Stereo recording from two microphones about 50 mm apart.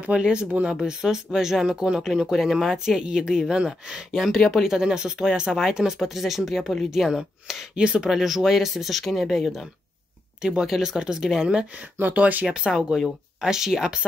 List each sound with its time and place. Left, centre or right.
0.0 s speech: right
0.7 s speech: centre
3.0 s speech: centre
4.1 s speech: centre
7.7 s speech: centre
8.1 s speech: centre
10.4 s speech: centre
12.0 s speech: right
12.4 s speech: centre